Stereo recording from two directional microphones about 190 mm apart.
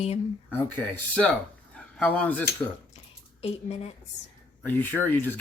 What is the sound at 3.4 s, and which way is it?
Speech, 35° left (ahead or behind).